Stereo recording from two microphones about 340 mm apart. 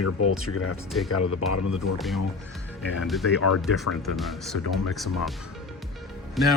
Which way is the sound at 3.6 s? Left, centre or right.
Centre.